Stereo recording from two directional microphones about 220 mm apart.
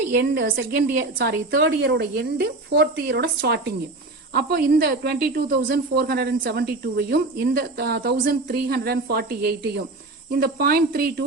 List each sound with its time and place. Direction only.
0.2 s speech: 45° right (ahead or behind)